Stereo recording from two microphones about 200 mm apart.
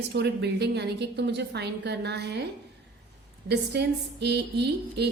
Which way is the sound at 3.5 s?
55° right (ahead or behind).